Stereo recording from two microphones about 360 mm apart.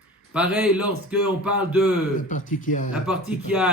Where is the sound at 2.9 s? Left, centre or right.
Centre.